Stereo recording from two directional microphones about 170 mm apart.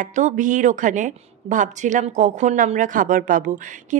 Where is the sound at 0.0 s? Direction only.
45° right (ahead or behind).